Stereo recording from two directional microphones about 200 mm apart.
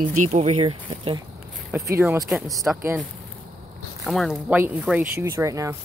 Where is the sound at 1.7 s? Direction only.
15° right (ahead or behind).